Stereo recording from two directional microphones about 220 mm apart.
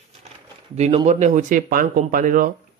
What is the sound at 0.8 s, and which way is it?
Speech, 30° right (ahead or behind).